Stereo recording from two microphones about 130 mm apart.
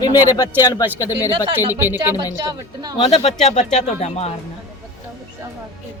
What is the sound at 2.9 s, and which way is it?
Speech, 50° left (ahead or behind).